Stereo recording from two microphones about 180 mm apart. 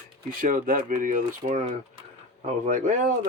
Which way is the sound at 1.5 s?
30° right (ahead or behind).